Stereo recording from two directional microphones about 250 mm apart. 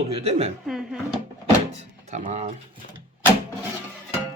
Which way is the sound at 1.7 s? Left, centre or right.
Right.